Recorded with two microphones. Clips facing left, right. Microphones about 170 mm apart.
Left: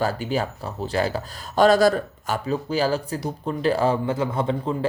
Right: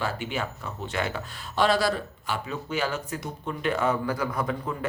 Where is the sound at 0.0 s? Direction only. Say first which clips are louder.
Left 6 dB; 40° left (ahead or behind).